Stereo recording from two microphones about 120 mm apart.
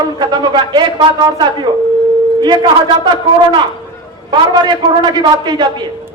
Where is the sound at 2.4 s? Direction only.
35° right (ahead or behind).